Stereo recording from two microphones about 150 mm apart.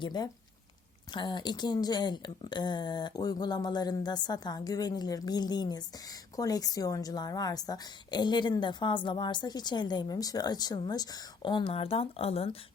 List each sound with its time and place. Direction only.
0.0 s a woman's voice: 30° left (ahead or behind)